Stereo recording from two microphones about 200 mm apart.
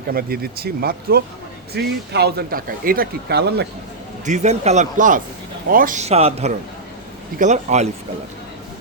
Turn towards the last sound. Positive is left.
turn(degrees=-35)  # may be behind; listen again after turning